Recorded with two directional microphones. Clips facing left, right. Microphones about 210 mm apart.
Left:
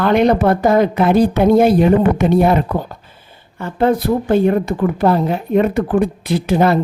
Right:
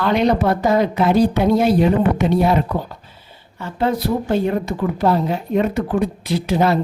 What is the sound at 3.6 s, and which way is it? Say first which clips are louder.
A woman's voice: left 5 dB; 50° left (ahead or behind).